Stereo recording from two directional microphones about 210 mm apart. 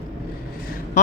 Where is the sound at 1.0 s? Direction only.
35° left (ahead or behind).